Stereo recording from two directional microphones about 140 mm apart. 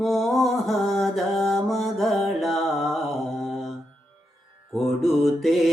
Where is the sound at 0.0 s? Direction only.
Centre (ahead or behind).